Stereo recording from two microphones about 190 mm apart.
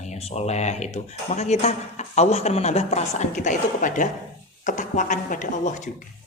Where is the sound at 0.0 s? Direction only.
35° left (ahead or behind).